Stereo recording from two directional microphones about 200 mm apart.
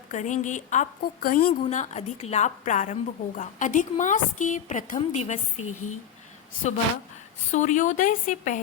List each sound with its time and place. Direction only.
0.1 s a woman's voice: 40° left (ahead or behind)
1.6 s a woman's voice: 35° left (ahead or behind)
7.5 s a woman's voice: 40° left (ahead or behind)